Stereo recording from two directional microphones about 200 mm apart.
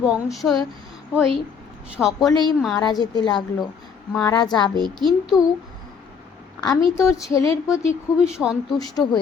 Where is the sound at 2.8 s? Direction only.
20° left (ahead or behind).